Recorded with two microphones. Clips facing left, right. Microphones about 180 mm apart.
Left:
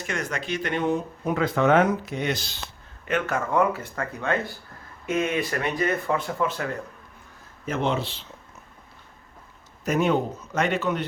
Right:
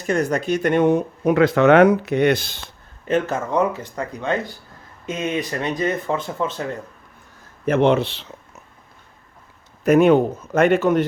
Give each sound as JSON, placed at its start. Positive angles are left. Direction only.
{"t": 0.0, "sound": "speech", "side_deg": -40}
{"t": 3.1, "sound": "speech", "side_deg": -30}
{"t": 7.6, "sound": "speech", "side_deg": -60}
{"t": 9.8, "sound": "speech", "side_deg": -60}